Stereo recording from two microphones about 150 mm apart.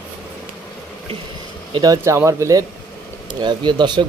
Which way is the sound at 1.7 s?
25° right (ahead or behind).